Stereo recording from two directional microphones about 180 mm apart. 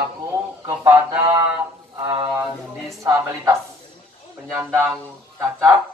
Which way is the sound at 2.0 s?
25° right (ahead or behind).